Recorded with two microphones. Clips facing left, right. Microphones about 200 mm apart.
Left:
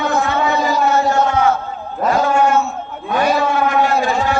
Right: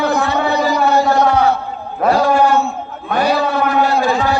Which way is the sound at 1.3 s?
35° right (ahead or behind).